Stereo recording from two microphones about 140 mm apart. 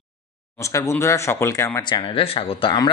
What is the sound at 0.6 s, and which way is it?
Speech, 20° left (ahead or behind).